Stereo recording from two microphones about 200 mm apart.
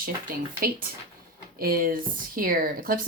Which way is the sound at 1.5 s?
45° right (ahead or behind).